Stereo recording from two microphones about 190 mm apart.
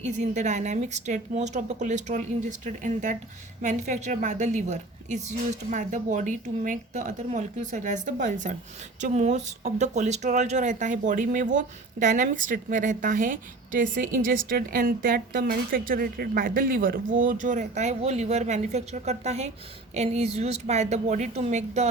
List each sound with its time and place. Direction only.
0.0 s a woman's voice: 40° right (ahead or behind)